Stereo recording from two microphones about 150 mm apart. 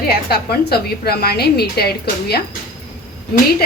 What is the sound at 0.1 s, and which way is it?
A woman's voice, 90° left.